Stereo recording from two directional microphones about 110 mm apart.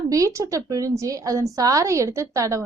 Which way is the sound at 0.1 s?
30° right (ahead or behind).